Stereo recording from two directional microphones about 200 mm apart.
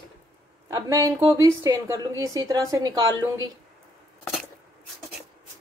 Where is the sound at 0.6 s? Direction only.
15° right (ahead or behind).